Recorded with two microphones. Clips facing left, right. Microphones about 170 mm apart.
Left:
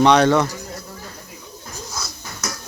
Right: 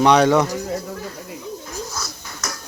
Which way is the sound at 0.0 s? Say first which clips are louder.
Even; 10° right (ahead or behind).